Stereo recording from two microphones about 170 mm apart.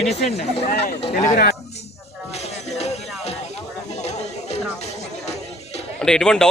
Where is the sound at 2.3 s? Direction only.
40° left (ahead or behind).